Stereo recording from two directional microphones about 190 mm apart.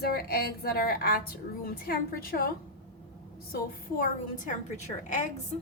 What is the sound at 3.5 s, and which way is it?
A woman's voice, 45° left (ahead or behind).